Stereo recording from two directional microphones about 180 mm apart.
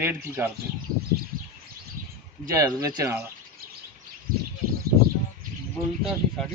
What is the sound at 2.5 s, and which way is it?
Speech, 20° right (ahead or behind).